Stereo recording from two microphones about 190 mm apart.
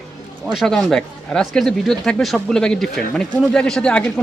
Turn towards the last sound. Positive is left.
turn(degrees=5)  # may be behind; listen again after turning